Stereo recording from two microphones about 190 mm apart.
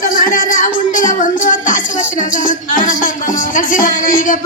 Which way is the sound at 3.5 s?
45° left (ahead or behind).